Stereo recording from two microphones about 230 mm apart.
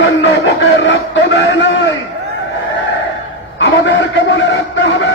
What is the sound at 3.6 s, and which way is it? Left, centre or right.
A man's voice, left.